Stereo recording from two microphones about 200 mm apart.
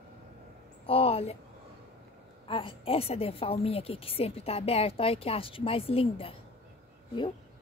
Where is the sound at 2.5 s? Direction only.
25° left (ahead or behind).